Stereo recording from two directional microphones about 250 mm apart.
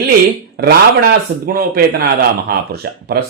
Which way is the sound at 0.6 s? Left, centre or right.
Right.